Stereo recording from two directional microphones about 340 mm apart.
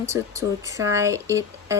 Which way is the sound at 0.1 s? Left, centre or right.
Centre.